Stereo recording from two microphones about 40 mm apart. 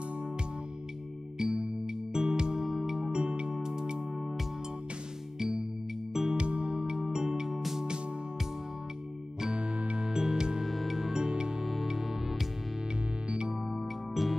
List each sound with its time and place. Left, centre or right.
1.4 s music: centre
2.6 s music: centre
3.0 s music: right
4.2 s music: centre
5.4 s music: centre
6.3 s music: right; by 7.8 s centre
9.4 s music: right
10.0 s music: centre
10.7 s music: centre
11.0 s music: centre
11.6 s music: centre
13.7 s music: centre